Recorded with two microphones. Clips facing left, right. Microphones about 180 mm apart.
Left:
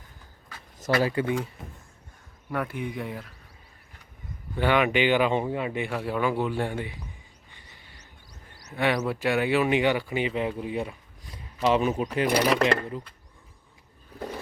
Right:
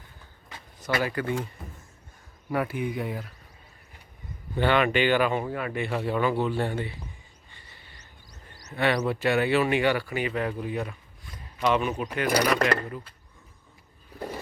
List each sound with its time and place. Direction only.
0.9 s speech: 25° left (ahead or behind)
2.5 s speech: 5° right (ahead or behind)
4.5 s speech: 10° left (ahead or behind)
5.9 s speech: 5° left (ahead or behind)
8.7 s speech: 10° left (ahead or behind)